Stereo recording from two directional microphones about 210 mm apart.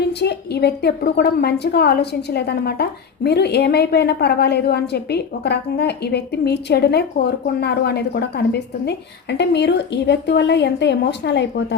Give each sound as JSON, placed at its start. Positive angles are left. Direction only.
{"t": 0.0, "sound": "a woman's voice", "side_deg": 50}